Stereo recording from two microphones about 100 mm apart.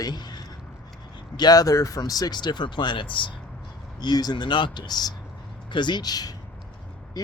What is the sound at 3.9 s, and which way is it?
Speech, 45° left (ahead or behind).